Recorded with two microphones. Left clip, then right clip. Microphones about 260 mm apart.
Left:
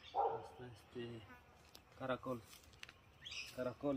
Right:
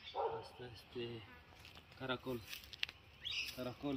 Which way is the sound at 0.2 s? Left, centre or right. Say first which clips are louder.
Left 3 dB; left.